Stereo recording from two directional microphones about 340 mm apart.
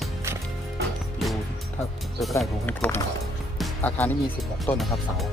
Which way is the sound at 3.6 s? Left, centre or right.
Centre.